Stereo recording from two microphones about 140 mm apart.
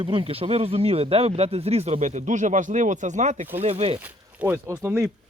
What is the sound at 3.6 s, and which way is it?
Speech, 45° right (ahead or behind).